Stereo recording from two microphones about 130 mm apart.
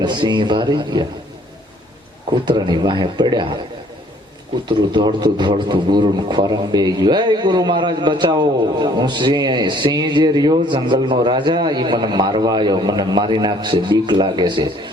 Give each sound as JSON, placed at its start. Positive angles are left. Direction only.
{"t": 0.0, "sound": "a man's voice", "side_deg": -35}
{"t": 2.4, "sound": "a man's voice", "side_deg": -35}
{"t": 4.7, "sound": "a man's voice", "side_deg": -35}